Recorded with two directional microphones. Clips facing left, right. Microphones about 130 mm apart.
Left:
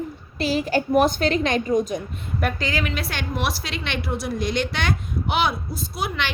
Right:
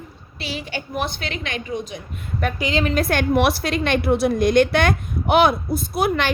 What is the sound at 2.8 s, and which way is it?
Speech, 45° right (ahead or behind).